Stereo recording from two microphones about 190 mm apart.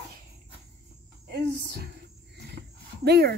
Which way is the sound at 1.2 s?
60° right (ahead or behind).